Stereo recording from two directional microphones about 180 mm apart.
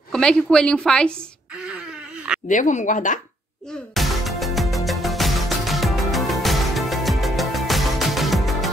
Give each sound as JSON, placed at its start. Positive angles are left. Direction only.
{"t": 0.1, "sound": "a woman's voice", "side_deg": 5}
{"t": 1.6, "sound": "a sound", "side_deg": -5}
{"t": 2.4, "sound": "speech", "side_deg": 45}
{"t": 3.9, "sound": "music", "side_deg": 0}